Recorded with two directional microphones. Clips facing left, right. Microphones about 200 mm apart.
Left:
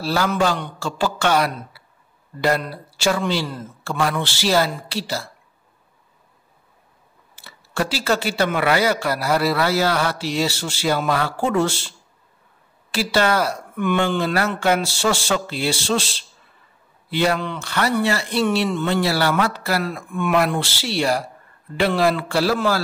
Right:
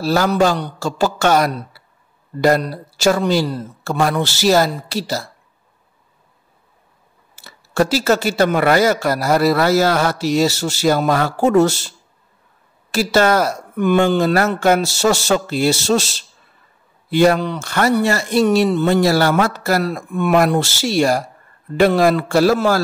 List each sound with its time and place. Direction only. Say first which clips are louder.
0.0 s a man's voice: right 5 dB; 45° right (ahead or behind)
7.3 s speech: right 7 dB; 40° right (ahead or behind)
12.9 s speech: right 5 dB; 45° right (ahead or behind)